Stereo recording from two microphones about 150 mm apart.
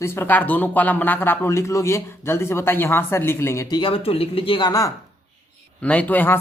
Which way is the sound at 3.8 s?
35° left (ahead or behind).